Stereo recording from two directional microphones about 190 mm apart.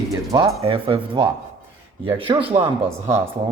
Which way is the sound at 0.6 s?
30° right (ahead or behind).